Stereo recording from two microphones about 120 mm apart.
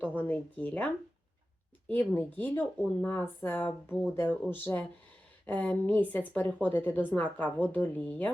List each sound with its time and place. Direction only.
0.0 s speech: 15° left (ahead or behind)
1.9 s speech: 15° left (ahead or behind)